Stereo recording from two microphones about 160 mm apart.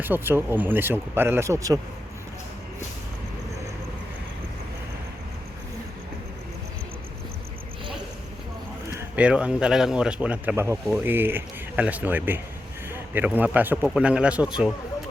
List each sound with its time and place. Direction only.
0.0 s speech: 10° right (ahead or behind)
8.9 s a sound: 15° right (ahead or behind)
9.2 s speech: 5° right (ahead or behind)